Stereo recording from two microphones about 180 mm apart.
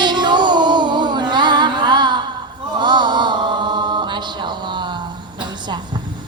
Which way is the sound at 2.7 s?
25° right (ahead or behind).